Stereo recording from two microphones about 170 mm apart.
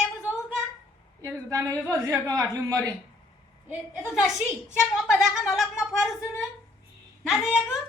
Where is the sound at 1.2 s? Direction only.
15° right (ahead or behind).